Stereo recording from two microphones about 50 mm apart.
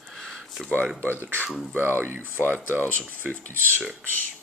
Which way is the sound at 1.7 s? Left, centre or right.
Right.